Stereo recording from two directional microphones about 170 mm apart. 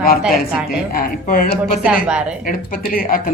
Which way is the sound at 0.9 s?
60° left (ahead or behind).